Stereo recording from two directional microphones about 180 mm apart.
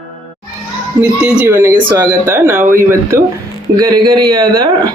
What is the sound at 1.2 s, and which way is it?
Speech, 10° right (ahead or behind).